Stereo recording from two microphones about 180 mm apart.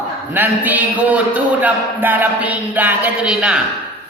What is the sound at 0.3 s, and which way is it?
A man's voice, 10° right (ahead or behind).